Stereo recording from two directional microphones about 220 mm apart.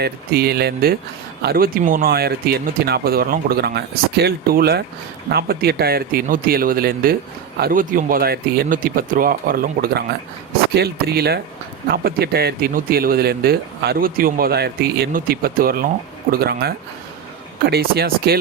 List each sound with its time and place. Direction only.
0.0 s speech: 45° right (ahead or behind)